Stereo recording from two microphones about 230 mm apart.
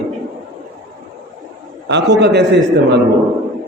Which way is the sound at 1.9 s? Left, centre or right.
Right.